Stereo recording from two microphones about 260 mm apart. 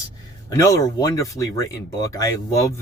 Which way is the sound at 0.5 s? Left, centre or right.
Centre.